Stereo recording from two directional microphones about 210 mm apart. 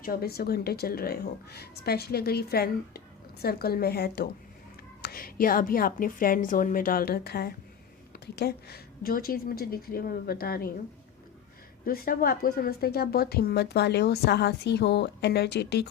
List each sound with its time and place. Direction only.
0.0 s speech: 45° left (ahead or behind)
11.9 s speech: 45° left (ahead or behind)